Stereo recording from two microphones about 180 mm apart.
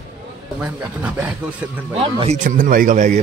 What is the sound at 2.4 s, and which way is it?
Speech, 50° right (ahead or behind).